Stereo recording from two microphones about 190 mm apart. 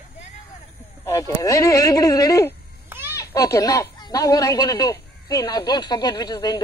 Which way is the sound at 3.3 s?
20° left (ahead or behind).